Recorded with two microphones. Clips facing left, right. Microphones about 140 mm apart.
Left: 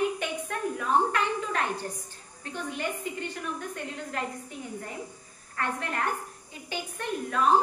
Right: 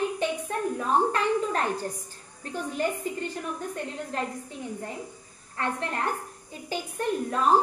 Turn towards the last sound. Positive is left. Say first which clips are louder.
# right 2 dB
turn(degrees=-35)  # may be behind; listen again after turning